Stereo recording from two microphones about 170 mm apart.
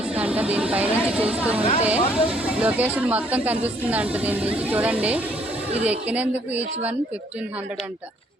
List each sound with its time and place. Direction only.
0.1 s speech: 5° right (ahead or behind)